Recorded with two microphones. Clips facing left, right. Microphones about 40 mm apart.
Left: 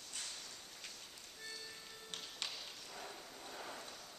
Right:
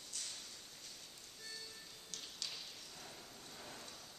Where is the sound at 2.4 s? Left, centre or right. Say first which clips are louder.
Left 1 dB; left.